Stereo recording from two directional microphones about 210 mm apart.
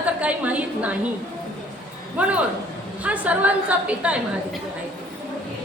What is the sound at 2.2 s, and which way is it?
A woman's voice, 5° right (ahead or behind).